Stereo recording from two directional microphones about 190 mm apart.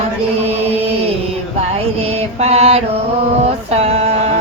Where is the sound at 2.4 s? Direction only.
35° right (ahead or behind).